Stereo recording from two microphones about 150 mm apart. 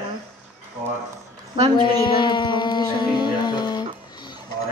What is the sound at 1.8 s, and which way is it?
Speech, 35° left (ahead or behind).